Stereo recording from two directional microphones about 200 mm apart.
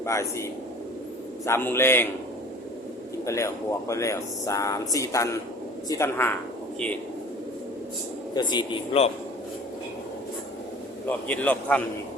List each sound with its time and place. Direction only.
0.0 s speech: 15° left (ahead or behind)
1.5 s speech: 10° left (ahead or behind)
3.2 s speech: 15° left (ahead or behind)
8.4 s a man's voice: 20° left (ahead or behind)
11.0 s speech: 5° left (ahead or behind)